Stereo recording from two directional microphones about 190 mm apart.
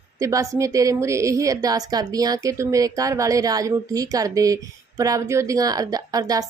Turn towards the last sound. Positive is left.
turn(degrees=-20)  # may be behind; listen again after turning